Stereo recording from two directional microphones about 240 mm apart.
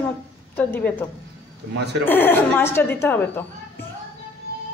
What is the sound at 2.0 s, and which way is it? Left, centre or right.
A woman's voice, centre.